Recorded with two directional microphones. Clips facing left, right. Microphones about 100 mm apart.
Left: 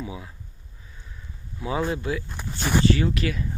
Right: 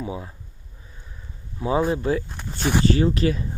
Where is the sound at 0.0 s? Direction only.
30° right (ahead or behind).